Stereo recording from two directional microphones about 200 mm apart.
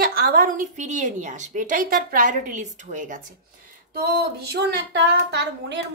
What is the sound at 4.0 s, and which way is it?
Speech, 50° right (ahead or behind).